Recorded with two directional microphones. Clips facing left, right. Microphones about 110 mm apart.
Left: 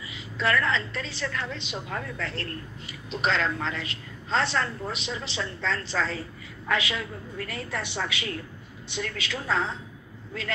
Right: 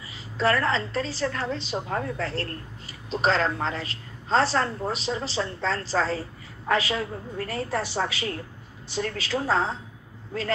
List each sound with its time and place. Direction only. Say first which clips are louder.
0.0 s a woman's voice: right 4 dB; 35° right (ahead or behind)